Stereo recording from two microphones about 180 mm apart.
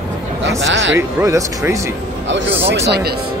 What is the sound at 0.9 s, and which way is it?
Speech, 15° right (ahead or behind).